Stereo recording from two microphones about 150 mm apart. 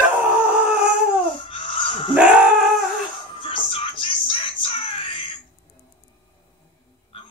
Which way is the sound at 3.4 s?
35° left (ahead or behind).